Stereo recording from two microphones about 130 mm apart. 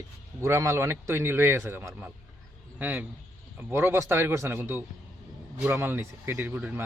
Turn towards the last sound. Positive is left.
turn(degrees=-15)  # may be behind; listen again after turning